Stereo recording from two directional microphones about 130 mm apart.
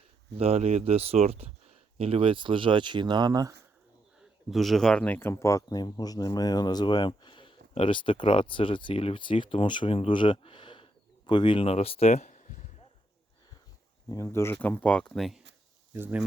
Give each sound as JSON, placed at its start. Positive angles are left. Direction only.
{"t": 0.3, "sound": "speech", "side_deg": -50}
{"t": 4.5, "sound": "speech", "side_deg": 0}
{"t": 14.1, "sound": "speech", "side_deg": 25}
{"t": 15.9, "sound": "speech", "side_deg": -15}